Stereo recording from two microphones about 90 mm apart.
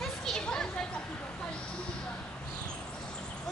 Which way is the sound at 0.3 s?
5° left (ahead or behind).